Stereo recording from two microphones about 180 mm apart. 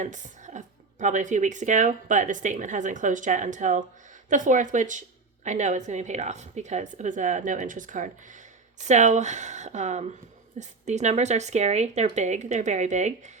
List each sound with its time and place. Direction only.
0.0 s a woman's voice: 45° right (ahead or behind)